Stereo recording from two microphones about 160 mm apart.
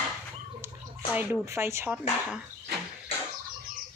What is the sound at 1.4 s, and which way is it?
Speech, 15° right (ahead or behind).